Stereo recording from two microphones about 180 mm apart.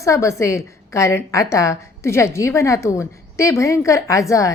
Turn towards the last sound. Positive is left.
turn(degrees=15)  # may be behind; listen again after turning